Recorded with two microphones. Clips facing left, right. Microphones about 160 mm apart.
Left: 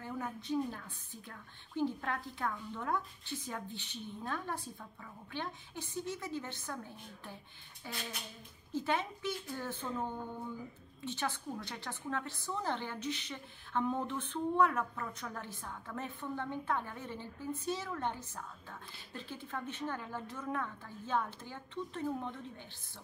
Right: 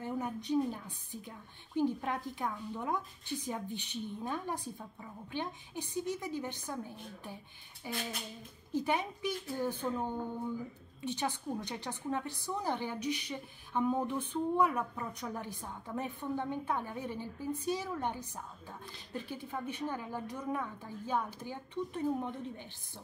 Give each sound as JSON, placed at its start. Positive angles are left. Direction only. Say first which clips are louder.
{"t": 0.0, "sound": "a woman's voice", "louder": "right 4 dB", "side_deg": -20}
{"t": 7.8, "sound": "a woman's voice", "louder": "right 4 dB", "side_deg": -15}